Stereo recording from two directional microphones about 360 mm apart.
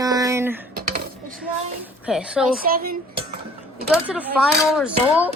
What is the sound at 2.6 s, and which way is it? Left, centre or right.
Speech, right.